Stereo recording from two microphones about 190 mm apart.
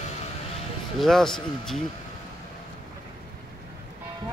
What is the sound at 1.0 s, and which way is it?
Speech, centre (ahead or behind).